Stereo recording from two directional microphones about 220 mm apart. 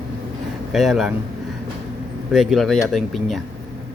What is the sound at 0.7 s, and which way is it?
Speech, centre (ahead or behind).